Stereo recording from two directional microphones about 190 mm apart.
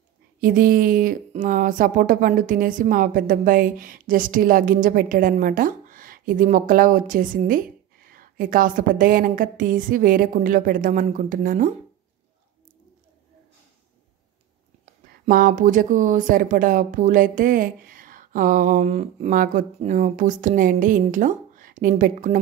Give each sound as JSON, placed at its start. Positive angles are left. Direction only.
{"t": 0.4, "sound": "speech", "side_deg": -45}
{"t": 15.2, "sound": "speech", "side_deg": -45}